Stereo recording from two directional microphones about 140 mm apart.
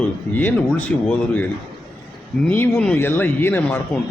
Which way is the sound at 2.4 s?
15° left (ahead or behind).